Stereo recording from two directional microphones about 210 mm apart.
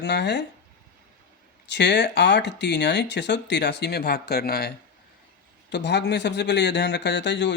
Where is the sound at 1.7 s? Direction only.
55° left (ahead or behind).